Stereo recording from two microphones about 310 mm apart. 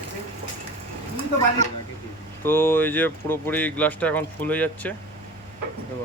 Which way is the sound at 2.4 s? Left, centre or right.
Centre.